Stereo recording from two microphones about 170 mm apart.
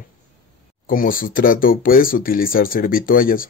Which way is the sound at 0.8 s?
55° left (ahead or behind).